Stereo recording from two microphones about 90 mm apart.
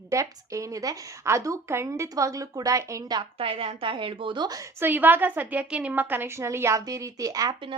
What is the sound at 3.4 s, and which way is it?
A woman's voice, 90° right.